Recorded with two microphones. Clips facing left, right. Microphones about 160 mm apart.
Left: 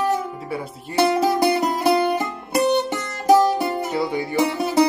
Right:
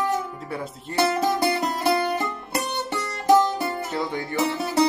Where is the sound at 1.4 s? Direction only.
15° left (ahead or behind).